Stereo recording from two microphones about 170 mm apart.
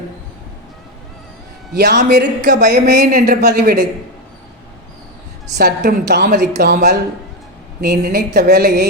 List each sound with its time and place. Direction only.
1.7 s a woman's voice: 75° right (ahead or behind)
2.6 s a woman's voice: 70° right (ahead or behind)
5.5 s a woman's voice: 70° right (ahead or behind)